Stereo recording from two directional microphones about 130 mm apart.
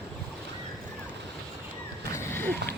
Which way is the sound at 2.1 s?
15° left (ahead or behind).